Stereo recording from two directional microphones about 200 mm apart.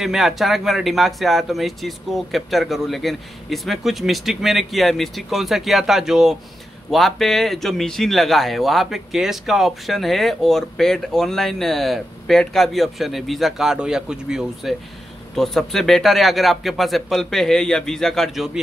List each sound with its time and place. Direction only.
0.0 s a man's voice: centre (ahead or behind)